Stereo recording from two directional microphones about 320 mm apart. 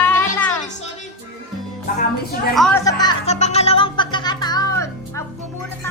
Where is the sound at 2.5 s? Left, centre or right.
Centre.